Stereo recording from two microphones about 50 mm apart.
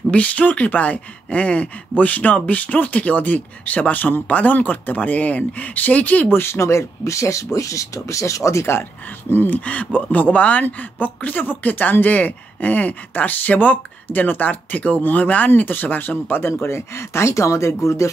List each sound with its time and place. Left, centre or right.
0.1 s speech: left
6.2 s speech: left
9.3 s speech: left
9.7 s speech: left
16.6 s speech: left